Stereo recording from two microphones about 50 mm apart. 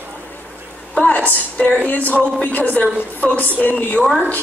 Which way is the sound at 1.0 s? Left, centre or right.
Left.